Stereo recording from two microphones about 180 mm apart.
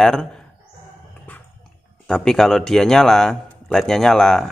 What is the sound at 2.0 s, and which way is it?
A man's voice, 5° left (ahead or behind).